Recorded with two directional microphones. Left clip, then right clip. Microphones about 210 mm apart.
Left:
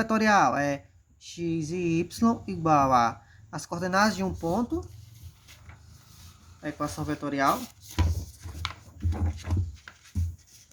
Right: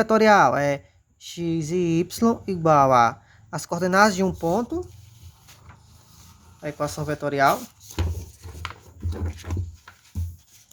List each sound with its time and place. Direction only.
0.0 s speech: 35° right (ahead or behind)
6.6 s speech: 45° right (ahead or behind)